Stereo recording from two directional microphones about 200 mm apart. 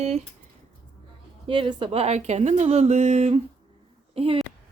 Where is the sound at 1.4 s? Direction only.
25° right (ahead or behind).